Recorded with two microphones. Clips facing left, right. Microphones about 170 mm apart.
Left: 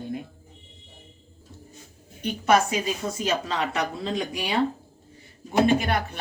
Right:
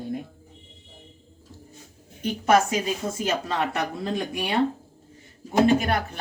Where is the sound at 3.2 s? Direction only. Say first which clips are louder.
Even; 55° right (ahead or behind).